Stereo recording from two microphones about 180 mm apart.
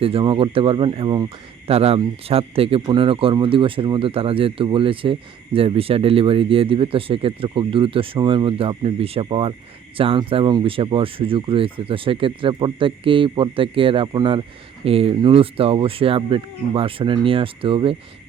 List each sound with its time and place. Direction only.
0.0 s speech: 30° right (ahead or behind)